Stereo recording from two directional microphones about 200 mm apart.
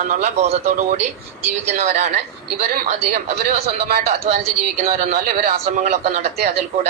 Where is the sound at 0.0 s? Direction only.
35° right (ahead or behind).